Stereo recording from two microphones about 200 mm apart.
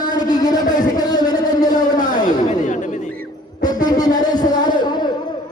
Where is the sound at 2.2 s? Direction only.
40° left (ahead or behind).